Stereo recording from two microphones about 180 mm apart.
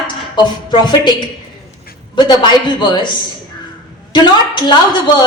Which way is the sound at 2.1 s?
25° left (ahead or behind).